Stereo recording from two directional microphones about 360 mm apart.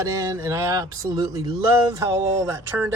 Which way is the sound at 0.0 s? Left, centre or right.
Centre.